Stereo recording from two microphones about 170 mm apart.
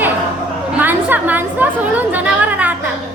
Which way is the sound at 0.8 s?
10° right (ahead or behind).